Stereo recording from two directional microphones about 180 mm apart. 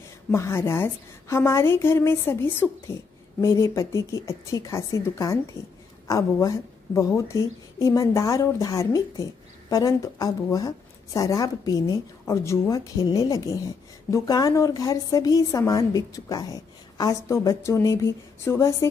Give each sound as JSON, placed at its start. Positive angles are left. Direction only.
{"t": 0.3, "sound": "a woman's voice", "side_deg": 15}